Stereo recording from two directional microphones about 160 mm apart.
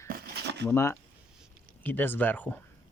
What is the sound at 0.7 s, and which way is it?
Speech, 15° left (ahead or behind).